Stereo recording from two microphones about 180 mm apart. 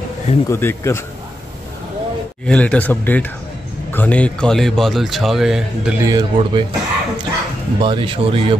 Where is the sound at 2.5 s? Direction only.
5° left (ahead or behind).